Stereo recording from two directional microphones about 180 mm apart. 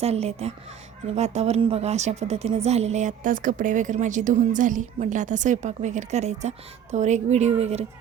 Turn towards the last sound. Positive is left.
turn(degrees=-35)  # may be behind; listen again after turning